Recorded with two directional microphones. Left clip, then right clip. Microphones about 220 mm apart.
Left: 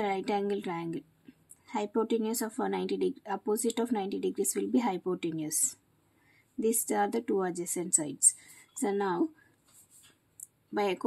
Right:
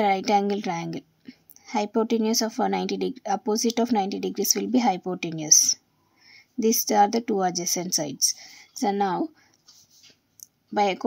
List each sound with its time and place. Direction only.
0.0 s a woman's voice: 35° right (ahead or behind)
10.7 s a woman's voice: 30° right (ahead or behind)